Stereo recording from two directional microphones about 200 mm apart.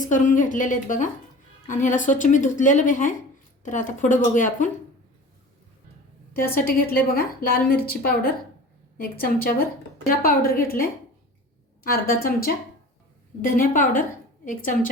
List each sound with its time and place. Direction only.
0.0 s a woman's voice: 40° left (ahead or behind)
6.5 s a woman's voice: 50° left (ahead or behind)